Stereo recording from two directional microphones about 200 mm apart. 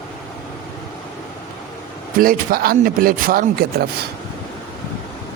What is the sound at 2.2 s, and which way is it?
A man's voice, 45° right (ahead or behind).